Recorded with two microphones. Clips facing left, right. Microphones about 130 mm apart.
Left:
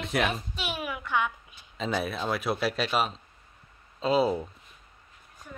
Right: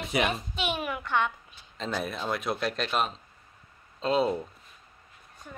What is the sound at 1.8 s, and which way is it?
Speech, centre (ahead or behind).